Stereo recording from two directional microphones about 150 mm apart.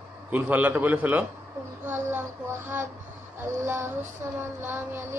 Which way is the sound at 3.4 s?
15° right (ahead or behind).